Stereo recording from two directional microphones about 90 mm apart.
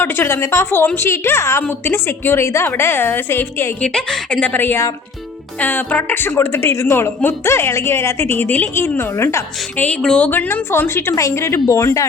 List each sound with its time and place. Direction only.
0.0 s a woman's voice: 25° left (ahead or behind)
3.8 s a woman's voice: 10° left (ahead or behind); by 9.4 s 30° left (ahead or behind)
9.7 s speech: 15° left (ahead or behind)
10.2 s a woman's voice: 25° left (ahead or behind)